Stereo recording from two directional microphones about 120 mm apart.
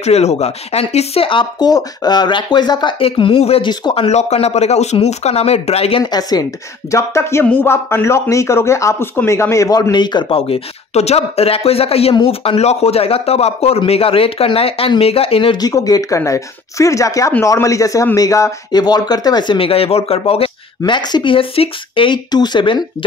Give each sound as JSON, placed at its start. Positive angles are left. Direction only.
{"t": 0.0, "sound": "speech", "side_deg": 65}
{"t": 3.1, "sound": "speech", "side_deg": 50}
{"t": 6.0, "sound": "speech", "side_deg": 35}
{"t": 10.5, "sound": "speech", "side_deg": 60}
{"t": 15.5, "sound": "speech", "side_deg": 30}